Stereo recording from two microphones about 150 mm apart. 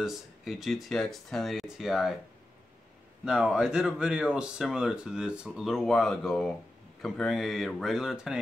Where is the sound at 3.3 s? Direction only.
5° right (ahead or behind).